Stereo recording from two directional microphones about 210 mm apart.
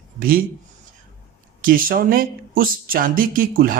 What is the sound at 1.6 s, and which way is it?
Speech, 40° right (ahead or behind).